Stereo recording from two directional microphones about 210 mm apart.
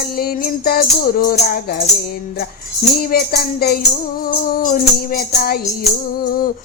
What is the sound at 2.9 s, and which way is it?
Music, 50° left (ahead or behind).